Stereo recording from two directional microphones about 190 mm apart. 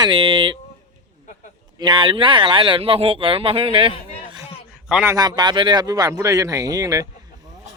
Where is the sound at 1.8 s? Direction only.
25° right (ahead or behind).